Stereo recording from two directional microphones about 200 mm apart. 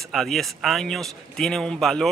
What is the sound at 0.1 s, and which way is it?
A man's voice, centre (ahead or behind).